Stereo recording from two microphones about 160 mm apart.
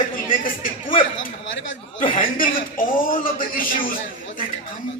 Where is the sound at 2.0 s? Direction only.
60° left (ahead or behind).